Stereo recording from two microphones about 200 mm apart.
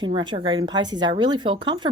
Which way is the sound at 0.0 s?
25° right (ahead or behind).